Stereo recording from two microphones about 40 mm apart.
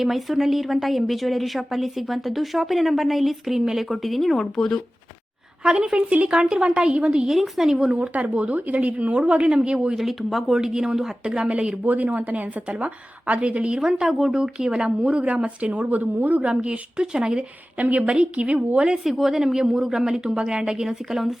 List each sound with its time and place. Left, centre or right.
0.0 s a woman's voice: centre
4.4 s speech: centre
5.6 s speech: right
7.3 s a woman's voice: centre
7.9 s a woman's voice: right
9.9 s a woman's voice: centre
10.5 s a woman's voice: centre
11.9 s a woman's voice: right
13.8 s a woman's voice: centre
14.8 s a woman's voice: right
16.5 s speech: right
17.7 s a woman's voice: right
19.0 s a woman's voice: centre